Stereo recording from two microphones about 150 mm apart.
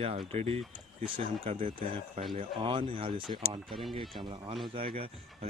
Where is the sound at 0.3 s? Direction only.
40° right (ahead or behind).